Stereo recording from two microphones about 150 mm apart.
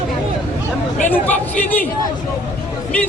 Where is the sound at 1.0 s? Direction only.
10° left (ahead or behind).